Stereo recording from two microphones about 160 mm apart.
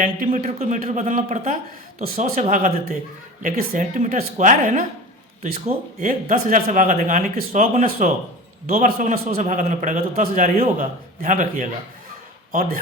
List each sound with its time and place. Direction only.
0.3 s a man's voice: 45° right (ahead or behind)
6.0 s a man's voice: 60° right (ahead or behind)